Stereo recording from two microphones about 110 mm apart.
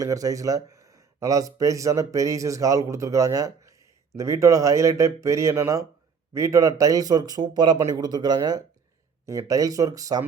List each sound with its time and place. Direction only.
0.0 s speech: 30° right (ahead or behind)